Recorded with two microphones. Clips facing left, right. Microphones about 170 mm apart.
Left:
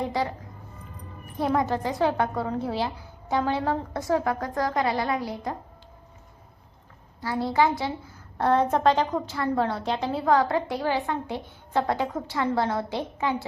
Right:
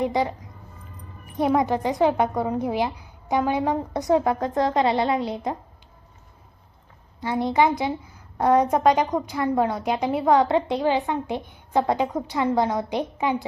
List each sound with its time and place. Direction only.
0.0 s a woman's voice: 20° right (ahead or behind)
1.4 s a woman's voice: 20° right (ahead or behind)
7.2 s a woman's voice: 20° right (ahead or behind)